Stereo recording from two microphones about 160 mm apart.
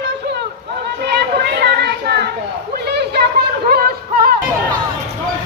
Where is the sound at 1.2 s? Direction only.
90° right; by 4.3 s 70° right (ahead or behind).